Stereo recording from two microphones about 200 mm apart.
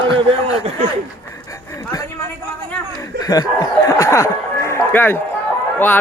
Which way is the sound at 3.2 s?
20° left (ahead or behind).